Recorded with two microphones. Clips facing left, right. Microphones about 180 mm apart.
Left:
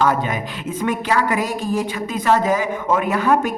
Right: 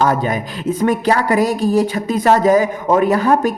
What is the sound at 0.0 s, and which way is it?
A man's voice, 40° right (ahead or behind).